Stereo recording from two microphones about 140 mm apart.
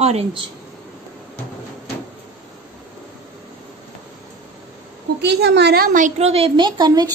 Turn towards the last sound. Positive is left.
turn(degrees=-30)  # may be behind; listen again after turning